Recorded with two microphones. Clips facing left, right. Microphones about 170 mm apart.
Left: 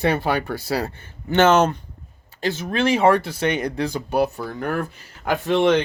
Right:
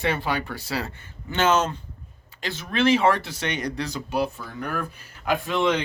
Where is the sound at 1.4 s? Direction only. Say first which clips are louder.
Left 6 dB; 70° left (ahead or behind).